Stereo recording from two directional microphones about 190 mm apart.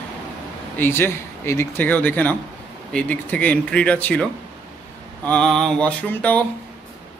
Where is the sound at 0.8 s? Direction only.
10° left (ahead or behind).